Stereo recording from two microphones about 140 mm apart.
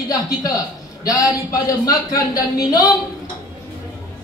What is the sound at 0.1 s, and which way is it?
A man's voice, 25° left (ahead or behind).